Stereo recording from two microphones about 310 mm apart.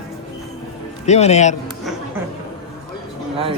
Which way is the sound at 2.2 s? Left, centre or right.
Centre.